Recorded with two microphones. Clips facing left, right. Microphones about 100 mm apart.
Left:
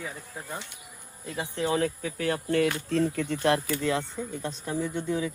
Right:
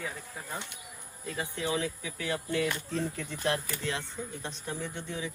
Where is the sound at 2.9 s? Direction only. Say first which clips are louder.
Left 8 dB; 70° left (ahead or behind).